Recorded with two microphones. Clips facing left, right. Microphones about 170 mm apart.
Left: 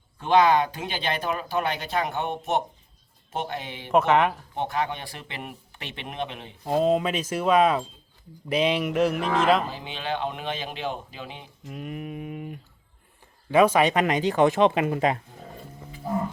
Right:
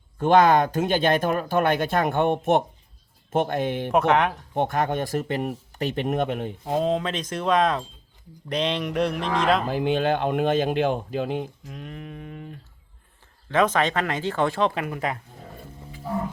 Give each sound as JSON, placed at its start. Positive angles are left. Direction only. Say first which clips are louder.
{"t": 0.2, "sound": "speech", "louder": "right 3 dB", "side_deg": -50}
{"t": 3.9, "sound": "speech", "louder": "left 1 dB", "side_deg": 0}
{"t": 4.5, "sound": "speech", "louder": "right 5 dB", "side_deg": -50}
{"t": 6.7, "sound": "speech", "louder": "left 2 dB", "side_deg": 5}
{"t": 9.6, "sound": "speech", "louder": "right 10 dB", "side_deg": -55}
{"t": 11.6, "sound": "speech", "louder": "left 3 dB", "side_deg": 5}